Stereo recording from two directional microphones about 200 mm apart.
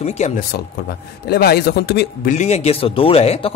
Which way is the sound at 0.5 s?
50° left (ahead or behind).